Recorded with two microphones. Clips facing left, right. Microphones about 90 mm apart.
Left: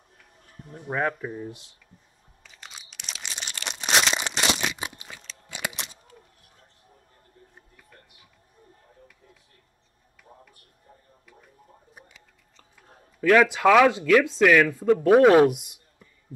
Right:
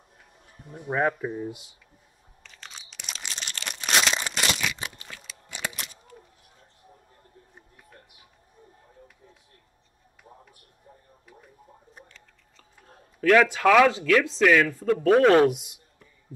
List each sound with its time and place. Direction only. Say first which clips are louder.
0.7 s speech: right 2 dB; 10° right (ahead or behind)
2.4 s crunch: even; 5° left (ahead or behind)
3.8 s crumpling: left 1 dB; centre (ahead or behind)
4.2 s crumpling: left 2 dB; 20° left (ahead or behind)
4.7 s a sound: left 2 dB; 20° left (ahead or behind)
12.5 s a sound: right 1 dB; 5° left (ahead or behind)
14.4 s speech: left 2 dB; 5° left (ahead or behind)